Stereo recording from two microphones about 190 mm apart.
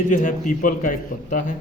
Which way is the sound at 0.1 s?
40° left (ahead or behind).